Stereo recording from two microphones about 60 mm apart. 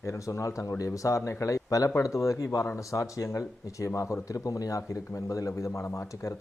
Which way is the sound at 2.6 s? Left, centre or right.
Left.